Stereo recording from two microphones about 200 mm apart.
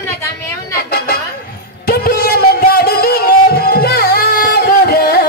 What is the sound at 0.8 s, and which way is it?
Speech, 50° left (ahead or behind).